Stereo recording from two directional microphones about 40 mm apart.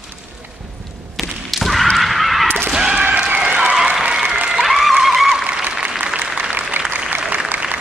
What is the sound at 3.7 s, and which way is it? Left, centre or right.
Applause, centre.